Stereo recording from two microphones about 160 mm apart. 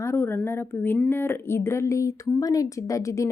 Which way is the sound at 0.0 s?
15° left (ahead or behind).